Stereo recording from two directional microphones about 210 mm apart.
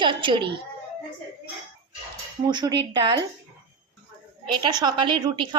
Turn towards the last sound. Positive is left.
turn(degrees=-20)  # may be behind; listen again after turning